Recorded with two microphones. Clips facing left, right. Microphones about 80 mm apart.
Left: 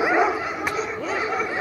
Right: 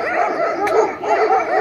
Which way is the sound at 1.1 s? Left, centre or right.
Right.